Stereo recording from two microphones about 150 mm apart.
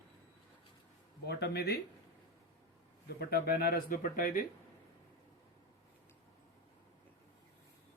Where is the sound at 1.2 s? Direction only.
90° left.